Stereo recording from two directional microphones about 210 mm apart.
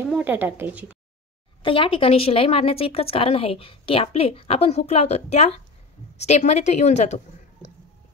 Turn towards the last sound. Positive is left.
turn(degrees=35)  # may be behind; listen again after turning